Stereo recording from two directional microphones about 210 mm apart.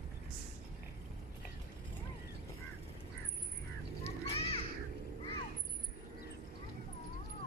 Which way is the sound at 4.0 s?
30° left (ahead or behind).